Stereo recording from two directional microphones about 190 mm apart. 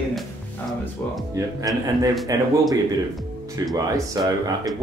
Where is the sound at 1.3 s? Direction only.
20° right (ahead or behind).